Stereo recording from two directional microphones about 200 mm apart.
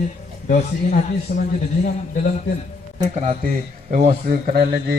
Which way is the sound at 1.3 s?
55° left (ahead or behind).